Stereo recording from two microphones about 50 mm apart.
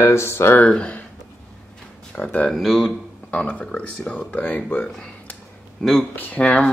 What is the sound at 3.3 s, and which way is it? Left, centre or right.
Speech, left.